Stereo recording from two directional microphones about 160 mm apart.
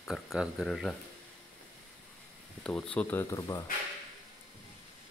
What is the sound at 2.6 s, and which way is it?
Speech, 5° left (ahead or behind).